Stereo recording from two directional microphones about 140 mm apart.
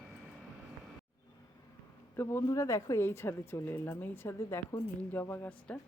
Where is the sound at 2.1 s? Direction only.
20° left (ahead or behind).